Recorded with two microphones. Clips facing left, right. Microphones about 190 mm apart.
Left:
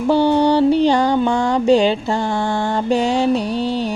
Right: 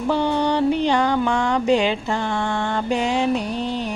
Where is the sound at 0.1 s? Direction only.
30° left (ahead or behind).